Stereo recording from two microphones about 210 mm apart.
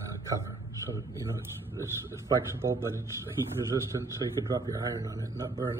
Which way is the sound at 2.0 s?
15° right (ahead or behind).